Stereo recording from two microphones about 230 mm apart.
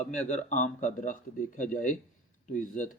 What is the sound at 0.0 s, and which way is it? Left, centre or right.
A man's voice, left.